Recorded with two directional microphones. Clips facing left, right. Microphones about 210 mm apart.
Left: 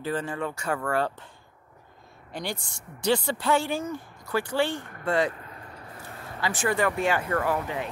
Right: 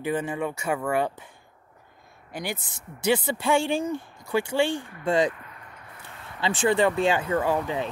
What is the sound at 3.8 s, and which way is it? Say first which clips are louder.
Speech: right 4 dB; 25° right (ahead or behind).